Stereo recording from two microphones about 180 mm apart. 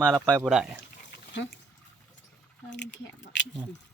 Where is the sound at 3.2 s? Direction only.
90° left.